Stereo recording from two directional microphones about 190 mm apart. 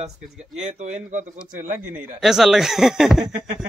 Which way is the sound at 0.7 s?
40° right (ahead or behind).